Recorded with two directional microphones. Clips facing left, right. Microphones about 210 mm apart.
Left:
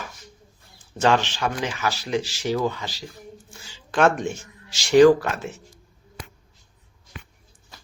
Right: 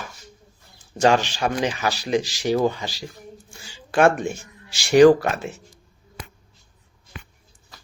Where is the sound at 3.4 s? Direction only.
10° right (ahead or behind).